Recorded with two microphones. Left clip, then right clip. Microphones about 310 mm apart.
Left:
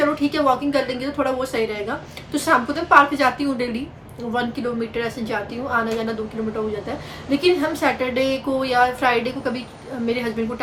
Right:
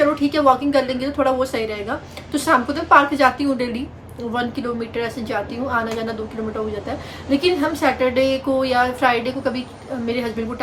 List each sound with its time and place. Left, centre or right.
0.0 s a woman's voice: centre